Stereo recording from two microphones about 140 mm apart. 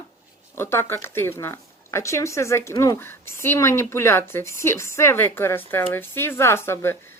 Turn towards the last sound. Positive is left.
turn(degrees=15)  # may be behind; listen again after turning